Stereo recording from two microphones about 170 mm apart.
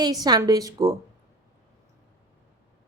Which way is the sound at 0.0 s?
25° right (ahead or behind).